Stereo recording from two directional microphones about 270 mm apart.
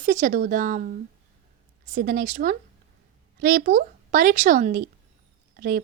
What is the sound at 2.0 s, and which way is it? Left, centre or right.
Speech, right.